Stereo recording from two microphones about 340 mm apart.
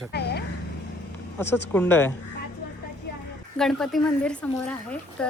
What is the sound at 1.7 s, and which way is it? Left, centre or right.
Speech, centre.